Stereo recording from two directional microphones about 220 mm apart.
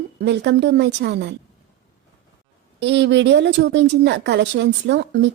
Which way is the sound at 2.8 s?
50° right (ahead or behind).